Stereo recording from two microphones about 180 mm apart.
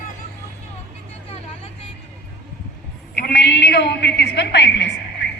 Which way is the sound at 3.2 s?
65° left (ahead or behind).